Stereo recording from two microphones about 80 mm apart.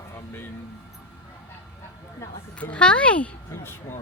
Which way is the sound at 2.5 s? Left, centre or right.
Centre.